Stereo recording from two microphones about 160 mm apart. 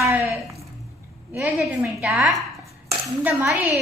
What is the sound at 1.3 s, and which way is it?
A woman's voice, 5° right (ahead or behind).